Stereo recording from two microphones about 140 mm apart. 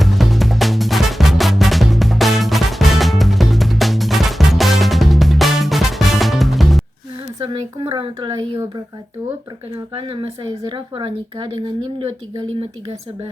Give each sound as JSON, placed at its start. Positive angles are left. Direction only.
{"t": 0.0, "sound": "music", "side_deg": 0}
{"t": 7.4, "sound": "a sound", "side_deg": -35}
{"t": 9.9, "sound": "speech", "side_deg": -35}